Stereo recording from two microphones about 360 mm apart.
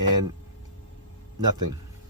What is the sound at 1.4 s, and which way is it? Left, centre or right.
Speech, right.